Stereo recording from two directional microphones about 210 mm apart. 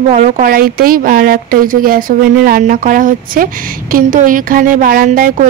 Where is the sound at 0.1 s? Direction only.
40° right (ahead or behind).